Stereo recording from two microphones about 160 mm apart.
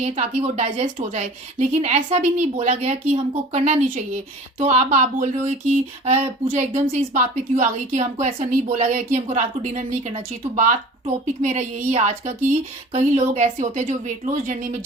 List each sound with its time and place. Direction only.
0.0 s a woman's voice: 40° right (ahead or behind)